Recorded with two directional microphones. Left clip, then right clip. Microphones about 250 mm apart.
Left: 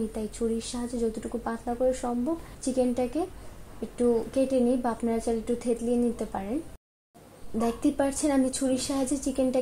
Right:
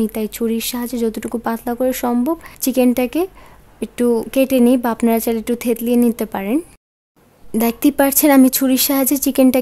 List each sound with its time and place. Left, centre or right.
0.1 s speech: right
7.5 s speech: right